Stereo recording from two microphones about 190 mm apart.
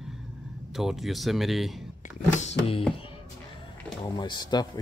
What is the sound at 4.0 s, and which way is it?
Speech, 25° left (ahead or behind).